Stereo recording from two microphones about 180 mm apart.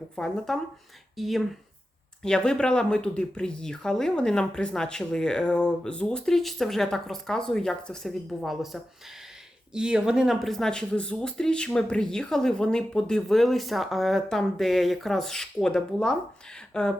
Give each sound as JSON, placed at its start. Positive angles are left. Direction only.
{"t": 0.2, "sound": "speech", "side_deg": 5}